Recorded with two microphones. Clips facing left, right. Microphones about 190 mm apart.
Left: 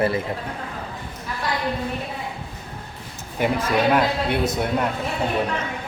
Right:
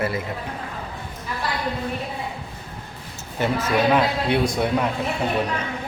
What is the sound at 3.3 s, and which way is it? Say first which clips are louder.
Speech: even; 10° left (ahead or behind).